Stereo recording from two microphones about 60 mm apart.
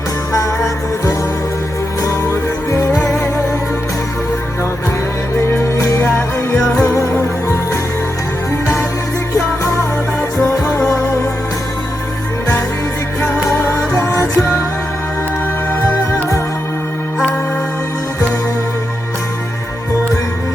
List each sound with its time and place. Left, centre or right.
2.0 s music: left
5.7 s music: left
6.1 s music: centre
6.8 s music: left
13.5 s music: left
14.1 s music: left